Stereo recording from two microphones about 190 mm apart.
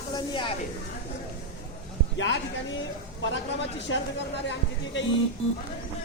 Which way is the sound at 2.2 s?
75° left (ahead or behind).